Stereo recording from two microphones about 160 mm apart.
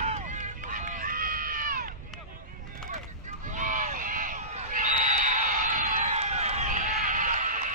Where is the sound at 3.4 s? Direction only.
55° right (ahead or behind).